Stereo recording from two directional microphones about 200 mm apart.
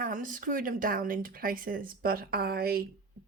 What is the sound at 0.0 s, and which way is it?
Speech, 40° right (ahead or behind).